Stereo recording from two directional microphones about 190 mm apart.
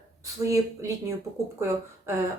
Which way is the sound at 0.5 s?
15° right (ahead or behind).